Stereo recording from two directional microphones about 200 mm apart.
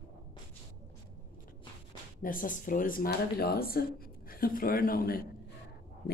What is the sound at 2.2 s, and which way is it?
Speech, 45° left (ahead or behind).